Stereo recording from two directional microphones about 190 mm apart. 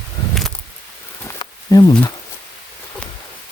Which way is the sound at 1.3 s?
20° left (ahead or behind).